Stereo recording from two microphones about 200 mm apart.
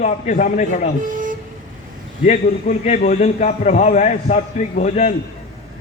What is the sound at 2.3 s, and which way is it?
A man's voice, 35° left (ahead or behind).